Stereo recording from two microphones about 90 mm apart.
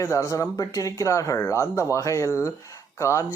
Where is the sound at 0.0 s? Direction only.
35° left (ahead or behind).